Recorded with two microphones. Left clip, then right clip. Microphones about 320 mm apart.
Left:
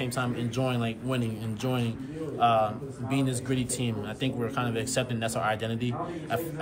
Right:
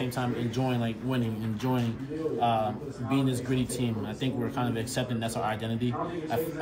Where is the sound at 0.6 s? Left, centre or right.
Centre.